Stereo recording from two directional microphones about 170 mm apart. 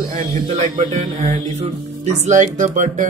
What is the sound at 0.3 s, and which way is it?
Speech, 45° right (ahead or behind).